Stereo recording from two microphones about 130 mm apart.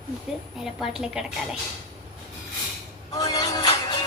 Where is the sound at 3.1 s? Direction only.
30° left (ahead or behind).